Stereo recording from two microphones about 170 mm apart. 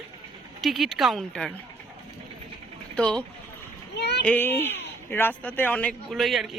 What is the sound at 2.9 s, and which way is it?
Speech, 5° left (ahead or behind).